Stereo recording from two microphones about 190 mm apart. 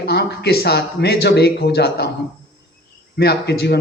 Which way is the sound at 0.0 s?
60° left (ahead or behind).